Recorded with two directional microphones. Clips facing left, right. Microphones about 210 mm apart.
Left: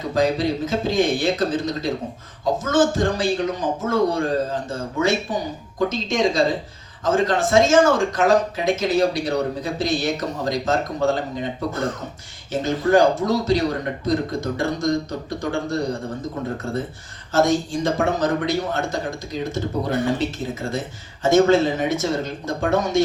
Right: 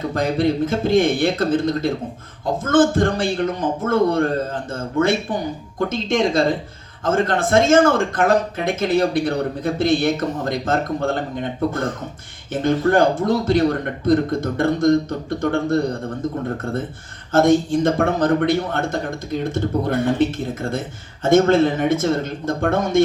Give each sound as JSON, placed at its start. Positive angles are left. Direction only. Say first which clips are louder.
{"t": 0.1, "sound": "speech", "louder": "left 1 dB", "side_deg": -55}
{"t": 12.5, "sound": "speech", "louder": "right 2 dB", "side_deg": -55}
{"t": 17.3, "sound": "speech", "louder": "right 4 dB", "side_deg": -55}